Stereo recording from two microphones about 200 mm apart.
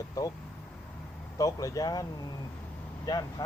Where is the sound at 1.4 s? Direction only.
15° left (ahead or behind).